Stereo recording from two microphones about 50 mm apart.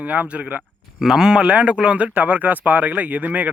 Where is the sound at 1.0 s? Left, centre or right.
Centre.